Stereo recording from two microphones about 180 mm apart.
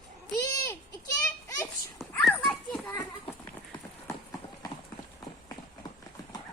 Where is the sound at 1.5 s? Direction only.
15° left (ahead or behind).